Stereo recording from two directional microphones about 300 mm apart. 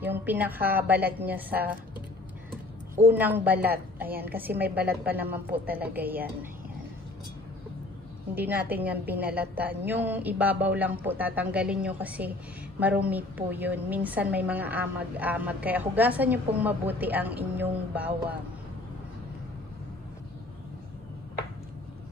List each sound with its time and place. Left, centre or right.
0.0 s a woman's voice: centre
3.0 s a woman's voice: centre
8.4 s a woman's voice: centre